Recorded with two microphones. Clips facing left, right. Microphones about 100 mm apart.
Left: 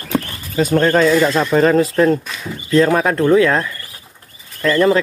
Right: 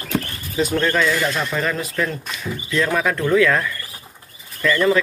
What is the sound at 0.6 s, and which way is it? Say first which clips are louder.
Speech: left 6 dB; 40° left (ahead or behind).